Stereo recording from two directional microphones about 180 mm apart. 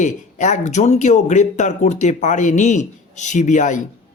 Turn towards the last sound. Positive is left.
turn(degrees=40)  # may be behind; listen again after turning